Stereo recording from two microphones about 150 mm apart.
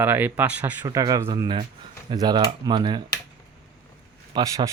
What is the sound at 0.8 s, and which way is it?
Speech, 25° right (ahead or behind).